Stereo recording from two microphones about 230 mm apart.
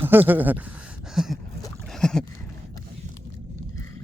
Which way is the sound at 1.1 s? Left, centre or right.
Centre.